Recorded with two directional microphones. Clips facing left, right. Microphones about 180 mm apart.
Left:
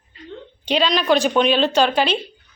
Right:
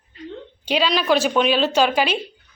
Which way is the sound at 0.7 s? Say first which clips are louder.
Left 1 dB; 5° right (ahead or behind).